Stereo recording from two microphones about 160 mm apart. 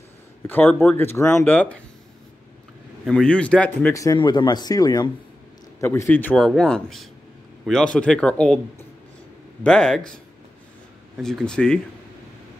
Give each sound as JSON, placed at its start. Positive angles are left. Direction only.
{"t": 0.5, "sound": "speech", "side_deg": 10}
{"t": 3.1, "sound": "speech", "side_deg": 5}
{"t": 3.9, "sound": "speech", "side_deg": 20}